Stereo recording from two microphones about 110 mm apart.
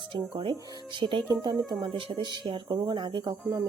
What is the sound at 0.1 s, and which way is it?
Speech, 45° right (ahead or behind).